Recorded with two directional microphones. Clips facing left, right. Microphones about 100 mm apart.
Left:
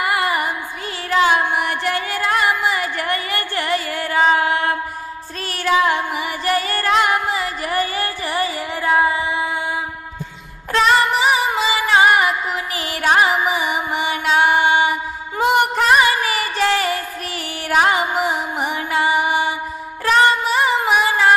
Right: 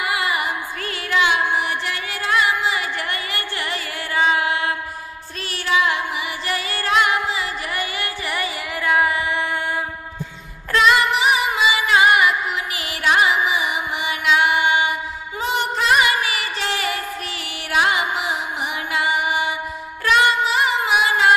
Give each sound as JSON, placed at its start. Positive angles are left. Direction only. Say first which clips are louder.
{"t": 0.0, "sound": "music", "louder": "left 3 dB", "side_deg": 45}
{"t": 1.1, "sound": "carnatic music", "louder": "left 3 dB", "side_deg": 40}
{"t": 5.5, "sound": "music", "louder": "left 3 dB", "side_deg": 40}
{"t": 10.7, "sound": "music", "louder": "left 1 dB", "side_deg": 35}
{"t": 15.3, "sound": "music", "louder": "left 7 dB", "side_deg": 55}
{"t": 15.9, "sound": "music", "louder": "even", "side_deg": 35}
{"t": 20.1, "sound": "female singing", "louder": "left 2 dB", "side_deg": 40}